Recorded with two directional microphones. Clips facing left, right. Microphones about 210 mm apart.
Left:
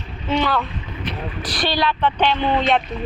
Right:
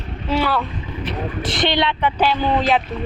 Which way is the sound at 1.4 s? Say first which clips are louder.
Right 2 dB; 25° right (ahead or behind).